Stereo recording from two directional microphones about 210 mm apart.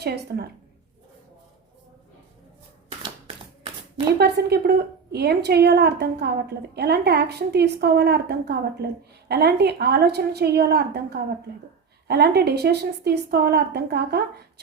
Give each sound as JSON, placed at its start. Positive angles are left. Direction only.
{"t": 0.3, "sound": "a woman's voice", "side_deg": -50}
{"t": 4.2, "sound": "a woman's voice", "side_deg": -50}